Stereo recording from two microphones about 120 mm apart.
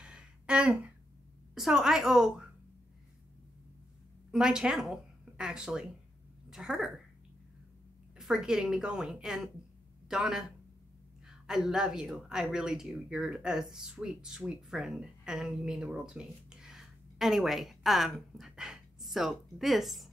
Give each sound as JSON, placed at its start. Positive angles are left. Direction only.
{"t": 0.0, "sound": "a sound", "side_deg": -10}
{"t": 1.5, "sound": "a woman's voice", "side_deg": -5}
{"t": 4.3, "sound": "a woman's voice", "side_deg": -5}
{"t": 8.2, "sound": "a woman's voice", "side_deg": -5}